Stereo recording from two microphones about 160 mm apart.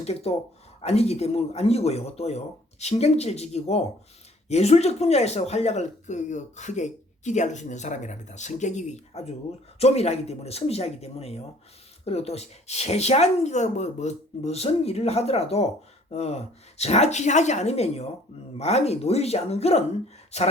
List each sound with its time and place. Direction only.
0.0 s speech: 40° left (ahead or behind)